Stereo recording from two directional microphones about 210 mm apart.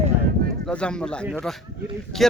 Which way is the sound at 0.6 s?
5° left (ahead or behind).